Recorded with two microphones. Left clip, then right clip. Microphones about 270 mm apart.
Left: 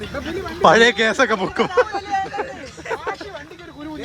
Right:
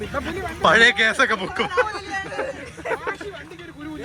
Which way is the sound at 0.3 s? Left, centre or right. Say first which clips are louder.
Left 4 dB; centre.